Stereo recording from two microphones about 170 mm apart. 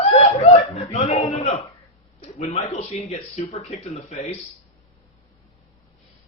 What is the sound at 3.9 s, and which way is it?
Speech, 40° left (ahead or behind).